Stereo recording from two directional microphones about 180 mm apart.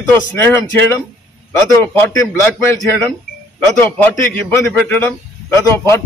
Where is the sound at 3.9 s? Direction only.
10° left (ahead or behind).